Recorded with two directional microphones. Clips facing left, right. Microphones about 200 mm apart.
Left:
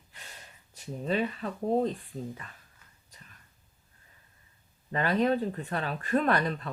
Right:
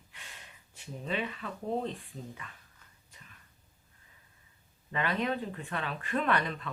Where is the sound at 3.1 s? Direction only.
40° left (ahead or behind).